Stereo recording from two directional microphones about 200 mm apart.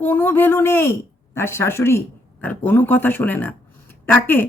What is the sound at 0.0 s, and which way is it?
A woman's voice, 10° left (ahead or behind).